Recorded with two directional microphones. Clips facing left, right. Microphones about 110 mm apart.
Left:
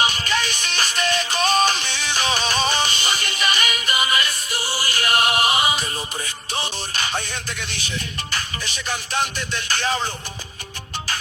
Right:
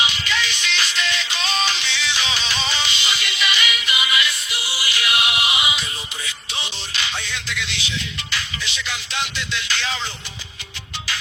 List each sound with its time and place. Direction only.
0.0 s music: 45° left (ahead or behind)